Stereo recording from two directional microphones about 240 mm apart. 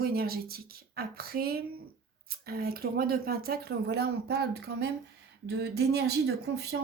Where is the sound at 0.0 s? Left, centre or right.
Right.